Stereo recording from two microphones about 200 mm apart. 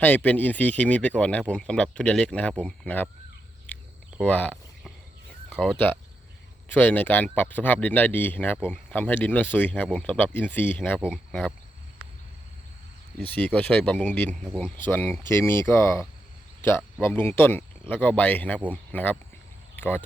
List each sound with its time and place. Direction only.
0.0 s speech: 10° left (ahead or behind)
3.7 s a sound: 10° left (ahead or behind)
5.5 s speech: 5° left (ahead or behind)
13.1 s speech: 10° left (ahead or behind)